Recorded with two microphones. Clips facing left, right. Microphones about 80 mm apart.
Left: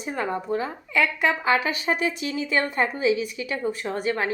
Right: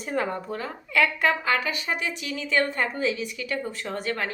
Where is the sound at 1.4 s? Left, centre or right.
Left.